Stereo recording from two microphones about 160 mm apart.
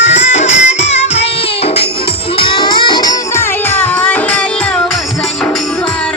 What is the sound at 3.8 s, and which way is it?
Music, 10° left (ahead or behind).